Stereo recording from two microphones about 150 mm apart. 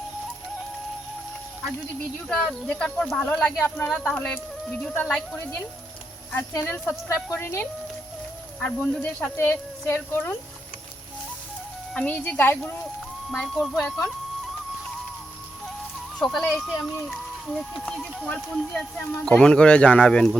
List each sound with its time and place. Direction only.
2.3 s speech: 5° left (ahead or behind)
3.8 s speech: 5° left (ahead or behind)
6.7 s speech: 15° left (ahead or behind)
11.9 s speech: 10° left (ahead or behind)
16.1 s speech: 5° left (ahead or behind)